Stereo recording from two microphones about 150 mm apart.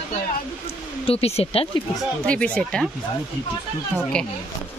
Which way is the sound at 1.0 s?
40° left (ahead or behind).